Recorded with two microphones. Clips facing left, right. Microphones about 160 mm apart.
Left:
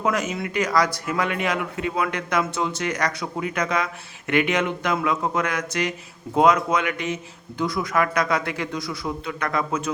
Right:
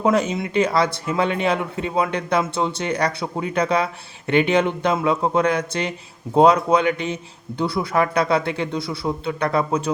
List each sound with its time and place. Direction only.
0.0 s a man's voice: 30° right (ahead or behind)